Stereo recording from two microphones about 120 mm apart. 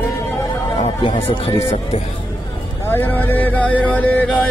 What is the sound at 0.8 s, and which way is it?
Speech, 50° left (ahead or behind).